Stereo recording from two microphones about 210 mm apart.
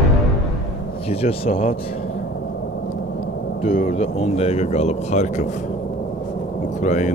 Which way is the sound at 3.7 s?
40° left (ahead or behind).